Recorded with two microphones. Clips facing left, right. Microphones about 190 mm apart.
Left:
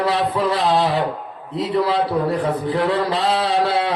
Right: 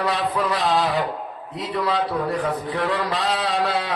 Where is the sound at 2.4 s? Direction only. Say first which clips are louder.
Left 4 dB; 30° left (ahead or behind).